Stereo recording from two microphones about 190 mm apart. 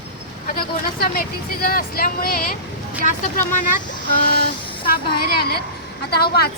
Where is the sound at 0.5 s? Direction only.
50° left (ahead or behind).